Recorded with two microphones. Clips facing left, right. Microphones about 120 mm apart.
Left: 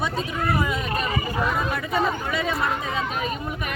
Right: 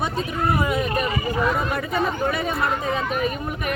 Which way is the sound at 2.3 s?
50° right (ahead or behind).